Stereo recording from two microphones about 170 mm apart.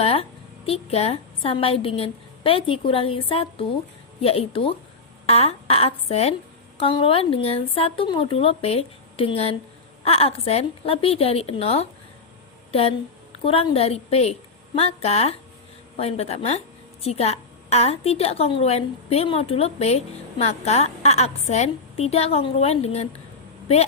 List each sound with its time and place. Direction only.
0.0 s a woman's voice: 35° left (ahead or behind)
13.4 s a woman's voice: 35° left (ahead or behind)